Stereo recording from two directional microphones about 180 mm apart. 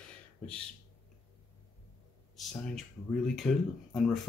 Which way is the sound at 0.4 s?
5° left (ahead or behind).